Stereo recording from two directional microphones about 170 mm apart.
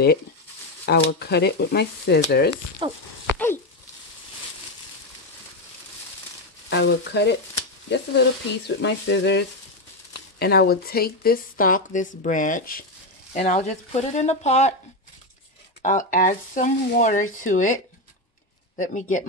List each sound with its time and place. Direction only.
0.8 s speech: 75° left (ahead or behind)
2.8 s speech: 30° right (ahead or behind)
6.7 s frying: 90° left
10.4 s speech: 70° left (ahead or behind); by 14.8 s 40° left (ahead or behind)
15.8 s speech: 50° left (ahead or behind)
18.8 s speech: 50° left (ahead or behind)